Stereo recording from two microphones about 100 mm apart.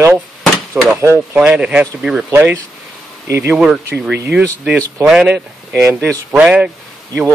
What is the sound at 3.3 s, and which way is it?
Speech, 20° right (ahead or behind).